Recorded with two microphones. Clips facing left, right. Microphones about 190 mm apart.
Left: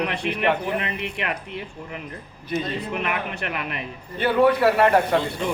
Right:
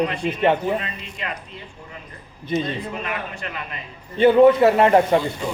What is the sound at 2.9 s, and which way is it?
Speech, 65° left (ahead or behind).